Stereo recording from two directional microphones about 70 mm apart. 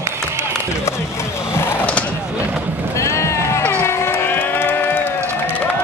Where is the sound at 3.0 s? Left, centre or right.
Left.